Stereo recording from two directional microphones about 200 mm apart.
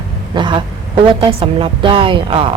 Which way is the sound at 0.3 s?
25° right (ahead or behind).